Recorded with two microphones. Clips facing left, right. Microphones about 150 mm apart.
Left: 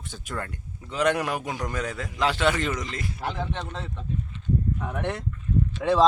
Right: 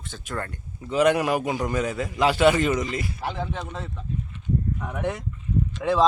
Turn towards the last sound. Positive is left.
turn(degrees=0)  # may be behind; listen again after turning